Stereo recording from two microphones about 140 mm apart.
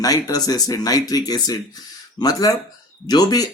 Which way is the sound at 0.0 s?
25° left (ahead or behind).